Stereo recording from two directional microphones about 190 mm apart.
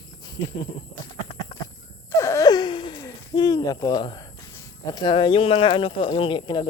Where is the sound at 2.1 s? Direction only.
15° left (ahead or behind).